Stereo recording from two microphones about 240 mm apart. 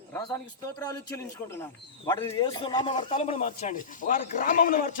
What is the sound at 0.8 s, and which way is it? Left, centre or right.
A man's voice, centre.